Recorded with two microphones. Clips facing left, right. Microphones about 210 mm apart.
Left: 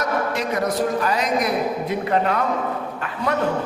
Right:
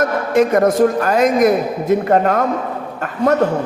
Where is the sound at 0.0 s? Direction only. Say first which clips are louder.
Right 8 dB; 50° right (ahead or behind).